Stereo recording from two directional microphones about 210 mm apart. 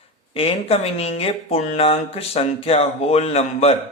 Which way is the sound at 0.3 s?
30° left (ahead or behind).